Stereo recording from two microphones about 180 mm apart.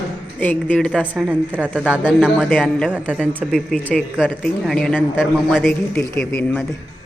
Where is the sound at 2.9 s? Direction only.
5° right (ahead or behind).